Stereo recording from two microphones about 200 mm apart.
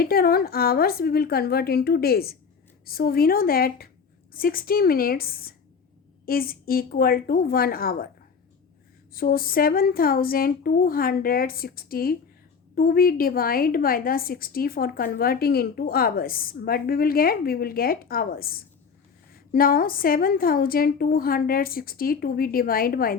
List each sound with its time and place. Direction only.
0.0 s a woman's voice: 50° left (ahead or behind)
9.1 s a woman's voice: 45° left (ahead or behind)